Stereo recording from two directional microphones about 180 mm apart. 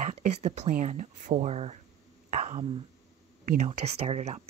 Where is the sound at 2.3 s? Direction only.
40° right (ahead or behind).